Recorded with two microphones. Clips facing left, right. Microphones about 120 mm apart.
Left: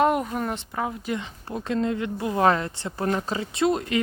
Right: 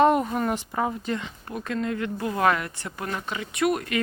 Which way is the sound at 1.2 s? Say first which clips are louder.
Left 1 dB; 25° left (ahead or behind).